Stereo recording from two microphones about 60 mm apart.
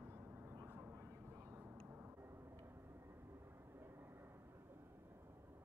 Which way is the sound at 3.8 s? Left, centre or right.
Right.